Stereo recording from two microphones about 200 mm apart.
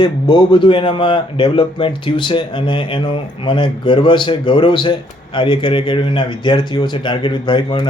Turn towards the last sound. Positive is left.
turn(degrees=25)  # may be behind; listen again after turning